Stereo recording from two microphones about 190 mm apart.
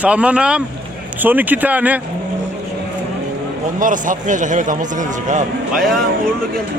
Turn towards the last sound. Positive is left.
turn(degrees=0)  # may be behind; listen again after turning